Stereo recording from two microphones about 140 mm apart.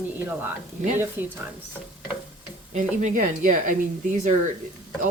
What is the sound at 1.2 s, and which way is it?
Speech, 15° right (ahead or behind).